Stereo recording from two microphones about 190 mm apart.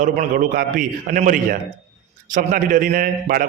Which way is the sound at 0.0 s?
45° right (ahead or behind).